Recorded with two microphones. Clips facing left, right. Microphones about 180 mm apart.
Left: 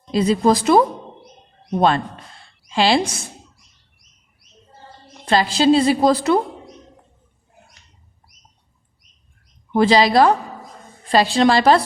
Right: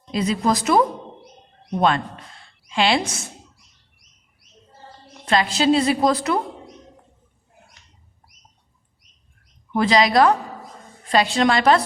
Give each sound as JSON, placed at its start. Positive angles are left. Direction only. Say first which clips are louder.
{"t": 0.1, "sound": "a woman's voice", "louder": "left 5 dB", "side_deg": 30}
{"t": 2.6, "sound": "a woman's voice", "louder": "left 3 dB", "side_deg": 35}
{"t": 5.2, "sound": "a woman's voice", "louder": "left 3 dB", "side_deg": 30}
{"t": 9.7, "sound": "a woman's voice", "louder": "left 3 dB", "side_deg": 30}